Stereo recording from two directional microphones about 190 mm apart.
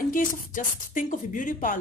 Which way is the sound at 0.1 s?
45° left (ahead or behind).